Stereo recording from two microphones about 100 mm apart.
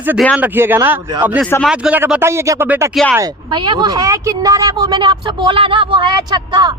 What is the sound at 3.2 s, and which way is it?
Speech, 45° right (ahead or behind).